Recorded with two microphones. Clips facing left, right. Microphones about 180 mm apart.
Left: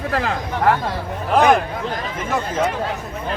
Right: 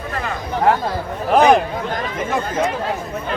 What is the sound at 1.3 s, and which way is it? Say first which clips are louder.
Speech: right 2 dB; 20° right (ahead or behind).